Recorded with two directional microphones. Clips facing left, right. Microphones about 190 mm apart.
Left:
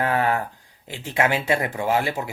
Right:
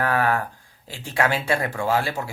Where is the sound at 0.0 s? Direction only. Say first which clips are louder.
Even; 20° left (ahead or behind).